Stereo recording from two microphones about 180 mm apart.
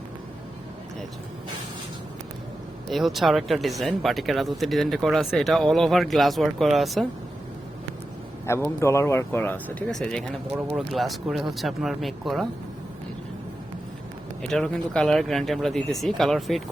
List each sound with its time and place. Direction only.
2.9 s speech: centre (ahead or behind)
8.4 s speech: 15° left (ahead or behind)
14.4 s speech: 5° left (ahead or behind)